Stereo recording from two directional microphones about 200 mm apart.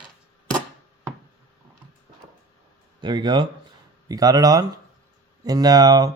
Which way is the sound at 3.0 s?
25° right (ahead or behind).